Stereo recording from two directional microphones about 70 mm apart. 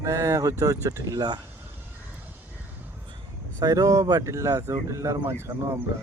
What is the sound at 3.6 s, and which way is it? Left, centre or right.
Speech, right.